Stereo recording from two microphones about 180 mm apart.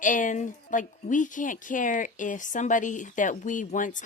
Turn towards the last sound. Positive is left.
turn(degrees=45)  # may be behind; listen again after turning